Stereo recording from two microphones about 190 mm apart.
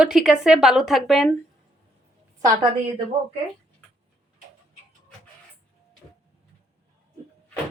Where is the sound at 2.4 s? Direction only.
30° right (ahead or behind).